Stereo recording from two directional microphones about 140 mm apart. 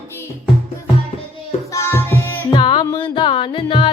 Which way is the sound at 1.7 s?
15° left (ahead or behind).